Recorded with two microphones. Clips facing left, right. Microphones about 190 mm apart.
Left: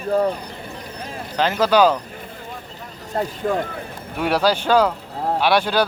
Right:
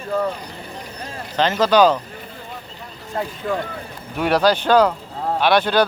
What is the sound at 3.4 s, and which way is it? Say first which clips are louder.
Speech: left 2 dB; 35° left (ahead or behind).